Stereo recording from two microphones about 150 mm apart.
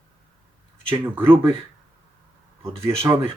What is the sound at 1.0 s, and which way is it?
Speech, 15° right (ahead or behind).